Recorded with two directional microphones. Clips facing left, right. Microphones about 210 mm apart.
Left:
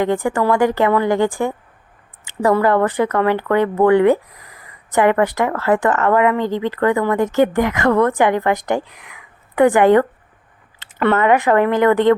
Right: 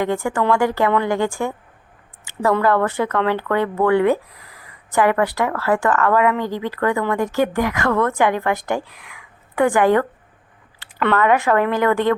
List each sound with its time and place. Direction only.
0.0 s speech: 15° left (ahead or behind)